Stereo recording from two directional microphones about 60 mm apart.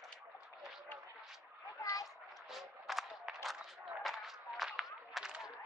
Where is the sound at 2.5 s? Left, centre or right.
Centre.